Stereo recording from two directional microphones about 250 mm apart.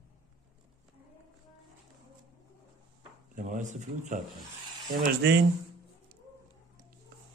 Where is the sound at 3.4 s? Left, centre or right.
Right.